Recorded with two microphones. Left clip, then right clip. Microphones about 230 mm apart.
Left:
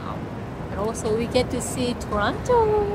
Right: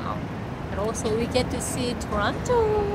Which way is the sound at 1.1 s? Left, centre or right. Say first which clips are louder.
Left 4 dB; left.